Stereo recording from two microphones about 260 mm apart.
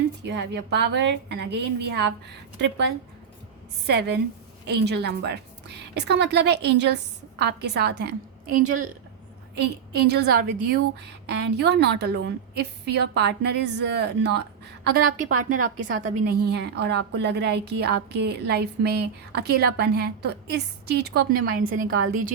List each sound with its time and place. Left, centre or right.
0.2 s a woman's voice: right
9.9 s a woman's voice: right
15.4 s a woman's voice: right
16.2 s a woman's voice: right